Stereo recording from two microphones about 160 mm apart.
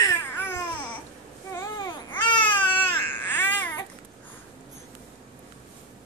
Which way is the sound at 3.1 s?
15° left (ahead or behind).